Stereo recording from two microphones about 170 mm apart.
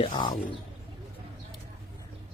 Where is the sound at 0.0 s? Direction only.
30° left (ahead or behind).